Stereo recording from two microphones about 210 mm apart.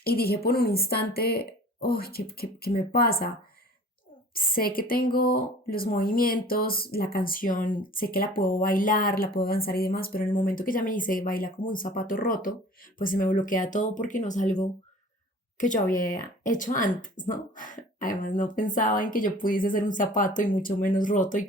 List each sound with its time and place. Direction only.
0.0 s speech: 45° left (ahead or behind)
4.4 s speech: 45° left (ahead or behind)